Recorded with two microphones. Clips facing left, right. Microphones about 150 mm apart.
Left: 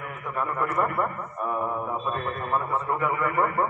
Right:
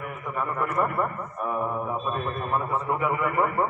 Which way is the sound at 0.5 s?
10° right (ahead or behind).